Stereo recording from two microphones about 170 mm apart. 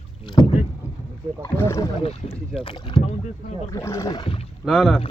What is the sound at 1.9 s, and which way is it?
Speech, 30° left (ahead or behind).